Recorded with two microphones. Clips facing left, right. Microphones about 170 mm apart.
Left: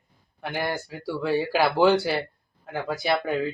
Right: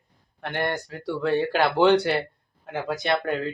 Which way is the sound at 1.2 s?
5° left (ahead or behind).